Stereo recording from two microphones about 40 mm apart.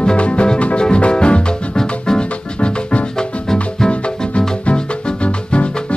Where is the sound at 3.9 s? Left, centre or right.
Left.